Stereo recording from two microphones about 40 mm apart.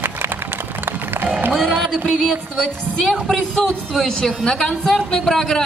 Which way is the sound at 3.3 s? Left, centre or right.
Centre.